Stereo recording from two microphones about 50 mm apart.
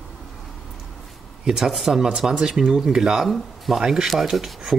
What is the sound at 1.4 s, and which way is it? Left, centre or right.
Speech, centre.